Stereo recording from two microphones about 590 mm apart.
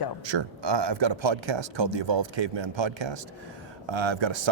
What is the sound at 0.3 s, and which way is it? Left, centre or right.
Speech, right.